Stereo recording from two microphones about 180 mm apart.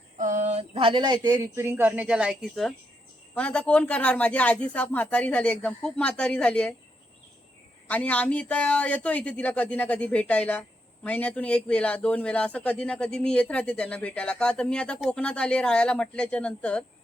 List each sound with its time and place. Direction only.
0.2 s speech: 45° right (ahead or behind); by 6.7 s 5° left (ahead or behind)
7.9 s speech: 10° left (ahead or behind)